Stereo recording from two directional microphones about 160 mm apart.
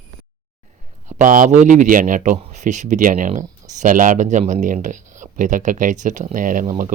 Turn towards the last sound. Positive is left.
turn(degrees=-55)  # may be behind; listen again after turning